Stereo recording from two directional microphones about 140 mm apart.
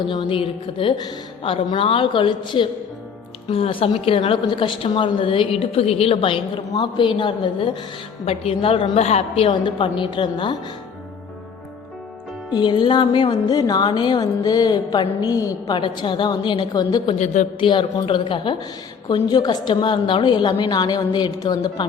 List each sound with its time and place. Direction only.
0.0 s speech: 35° left (ahead or behind)
12.5 s speech: 30° left (ahead or behind)
17.2 s a woman's voice: 55° left (ahead or behind)
17.6 s speech: 35° left (ahead or behind)